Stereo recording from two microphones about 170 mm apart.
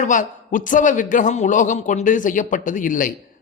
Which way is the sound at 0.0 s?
50° left (ahead or behind).